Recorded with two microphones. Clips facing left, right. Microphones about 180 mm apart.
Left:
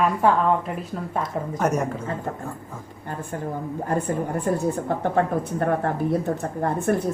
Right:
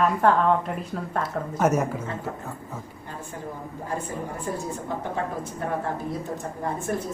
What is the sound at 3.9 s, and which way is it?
Speech, 60° left (ahead or behind).